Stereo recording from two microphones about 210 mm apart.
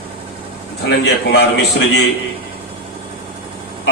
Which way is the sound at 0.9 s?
50° left (ahead or behind).